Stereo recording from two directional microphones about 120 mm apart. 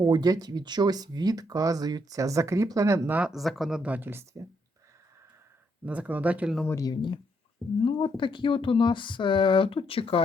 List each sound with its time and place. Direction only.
0.0 s speech: 35° right (ahead or behind)
3.2 s speech: 5° right (ahead or behind); by 4.4 s 20° right (ahead or behind)
5.8 s speech: 10° right (ahead or behind)
6.7 s speech: 30° left (ahead or behind); by 10.2 s 50° left (ahead or behind)